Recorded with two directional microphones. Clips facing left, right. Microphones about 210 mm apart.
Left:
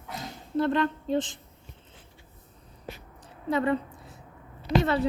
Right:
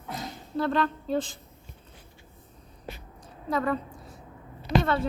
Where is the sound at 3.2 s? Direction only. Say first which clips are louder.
Left 2 dB; 25° left (ahead or behind).